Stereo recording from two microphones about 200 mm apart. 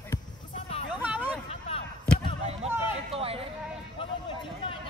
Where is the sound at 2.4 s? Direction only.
30° right (ahead or behind).